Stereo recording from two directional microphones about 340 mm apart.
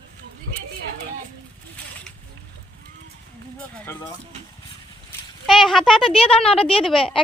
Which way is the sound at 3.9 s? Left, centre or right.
Centre.